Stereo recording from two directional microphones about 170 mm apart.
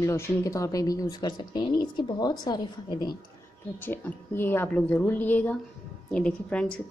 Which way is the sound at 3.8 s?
10° left (ahead or behind).